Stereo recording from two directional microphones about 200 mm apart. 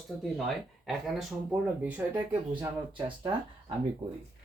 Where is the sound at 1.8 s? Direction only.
10° right (ahead or behind).